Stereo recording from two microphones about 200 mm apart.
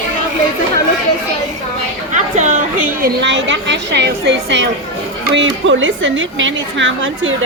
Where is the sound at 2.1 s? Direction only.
35° right (ahead or behind).